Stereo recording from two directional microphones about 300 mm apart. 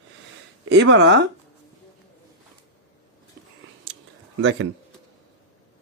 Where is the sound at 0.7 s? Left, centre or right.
Right.